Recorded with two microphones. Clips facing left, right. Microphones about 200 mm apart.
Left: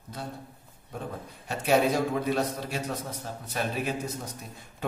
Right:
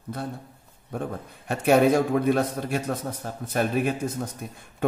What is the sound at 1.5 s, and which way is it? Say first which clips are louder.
A man's voice: right 5 dB; 55° right (ahead or behind).